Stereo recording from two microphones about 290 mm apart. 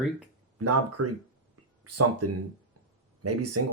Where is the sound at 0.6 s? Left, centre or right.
Right.